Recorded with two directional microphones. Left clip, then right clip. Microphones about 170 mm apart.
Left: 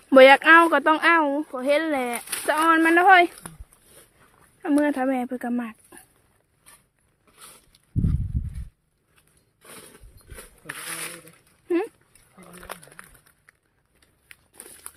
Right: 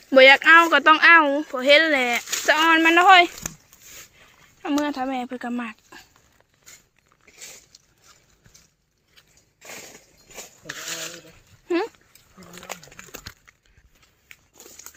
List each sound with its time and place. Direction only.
0.1 s speech: 30° left (ahead or behind); by 2.2 s 10° left (ahead or behind)
2.5 s speech: 25° left (ahead or behind)
4.6 s speech: 45° left (ahead or behind); by 6.1 s 25° left (ahead or behind)
12.5 s a sound: 5° left (ahead or behind)
14.3 s crumpling: centre (ahead or behind)